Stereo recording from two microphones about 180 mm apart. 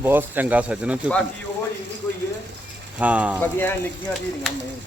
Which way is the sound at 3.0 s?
10° right (ahead or behind).